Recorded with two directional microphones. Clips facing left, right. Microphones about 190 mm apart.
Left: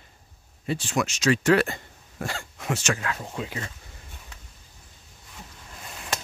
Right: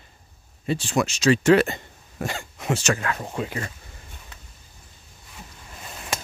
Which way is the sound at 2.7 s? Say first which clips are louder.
Right 4 dB; 35° right (ahead or behind).